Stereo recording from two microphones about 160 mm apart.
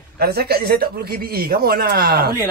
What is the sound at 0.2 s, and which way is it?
A man's voice, 80° right.